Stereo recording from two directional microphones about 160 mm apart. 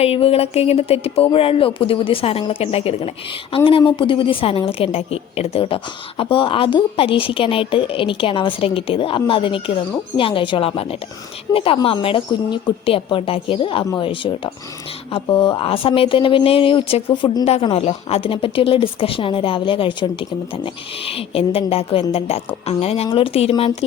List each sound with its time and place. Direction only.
0.0 s a woman's voice: 40° left (ahead or behind)